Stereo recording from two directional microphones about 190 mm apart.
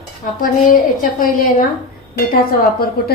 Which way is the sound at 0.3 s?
45° left (ahead or behind).